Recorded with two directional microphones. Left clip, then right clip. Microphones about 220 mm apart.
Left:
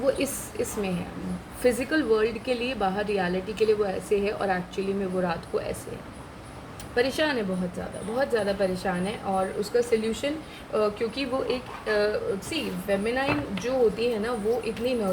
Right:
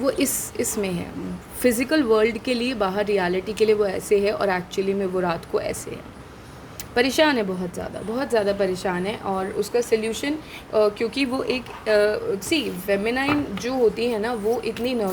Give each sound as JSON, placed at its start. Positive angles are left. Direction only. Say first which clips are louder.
{"t": 0.0, "sound": "a woman's voice", "louder": "right 3 dB", "side_deg": -40}
{"t": 6.9, "sound": "a woman's voice", "louder": "right 6 dB", "side_deg": -50}